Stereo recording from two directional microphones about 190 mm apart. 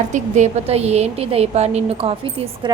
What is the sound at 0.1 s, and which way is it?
A woman's voice, 40° right (ahead or behind).